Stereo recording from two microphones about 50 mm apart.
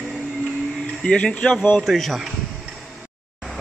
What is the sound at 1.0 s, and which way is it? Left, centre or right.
Speech, centre.